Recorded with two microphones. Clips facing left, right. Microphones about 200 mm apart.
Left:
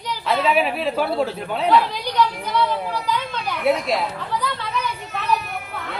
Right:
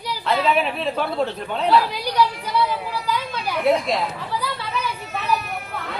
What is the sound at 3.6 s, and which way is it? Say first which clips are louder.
Speech: right 1 dB; centre (ahead or behind).